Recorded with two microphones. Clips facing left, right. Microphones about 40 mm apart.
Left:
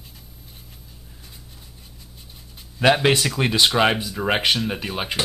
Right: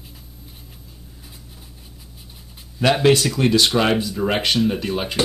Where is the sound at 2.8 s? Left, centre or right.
Centre.